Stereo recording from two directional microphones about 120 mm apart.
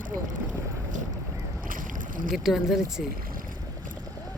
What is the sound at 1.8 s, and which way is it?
Boat, 90° right.